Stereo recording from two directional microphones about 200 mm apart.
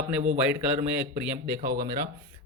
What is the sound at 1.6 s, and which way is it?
Speech, 20° right (ahead or behind).